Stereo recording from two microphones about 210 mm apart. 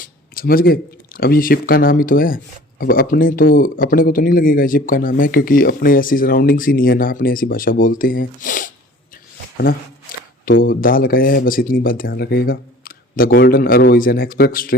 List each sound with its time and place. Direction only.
0.0 s speech: 45° left (ahead or behind)
10.4 s speech: 40° left (ahead or behind)